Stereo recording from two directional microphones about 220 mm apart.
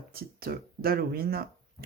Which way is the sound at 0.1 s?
45° right (ahead or behind).